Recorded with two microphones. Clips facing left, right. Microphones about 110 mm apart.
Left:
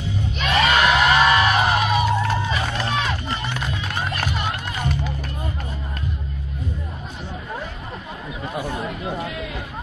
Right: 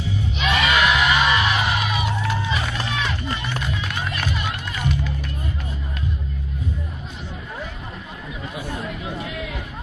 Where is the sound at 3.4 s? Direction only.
35° left (ahead or behind).